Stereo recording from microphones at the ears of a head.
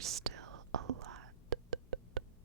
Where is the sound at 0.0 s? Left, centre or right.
Right.